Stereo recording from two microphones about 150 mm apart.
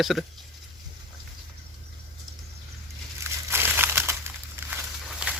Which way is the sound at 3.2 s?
15° right (ahead or behind).